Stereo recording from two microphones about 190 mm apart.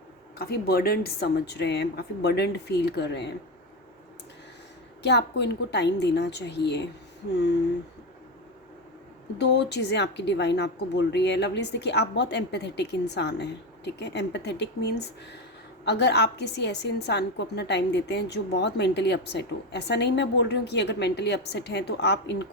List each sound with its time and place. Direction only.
0.3 s a woman's voice: 55° left (ahead or behind)
5.0 s a woman's voice: 60° left (ahead or behind)
9.4 s a woman's voice: 65° left (ahead or behind)